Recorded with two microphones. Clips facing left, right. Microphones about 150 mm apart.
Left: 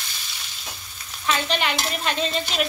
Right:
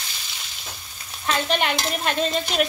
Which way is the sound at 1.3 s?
50° right (ahead or behind).